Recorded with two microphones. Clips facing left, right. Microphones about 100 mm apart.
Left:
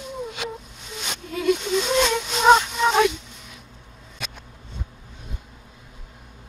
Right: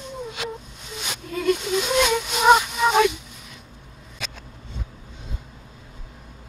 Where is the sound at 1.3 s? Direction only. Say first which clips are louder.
Left 1 dB; centre (ahead or behind).